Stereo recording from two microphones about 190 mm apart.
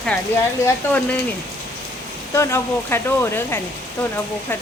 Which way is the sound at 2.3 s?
15° left (ahead or behind).